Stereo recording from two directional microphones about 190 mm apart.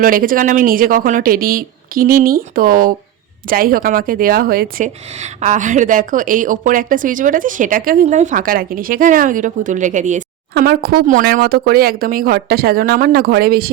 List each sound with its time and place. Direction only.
0.0 s speech: 50° right (ahead or behind)
5.2 s speech: 40° right (ahead or behind)
10.5 s speech: 55° right (ahead or behind)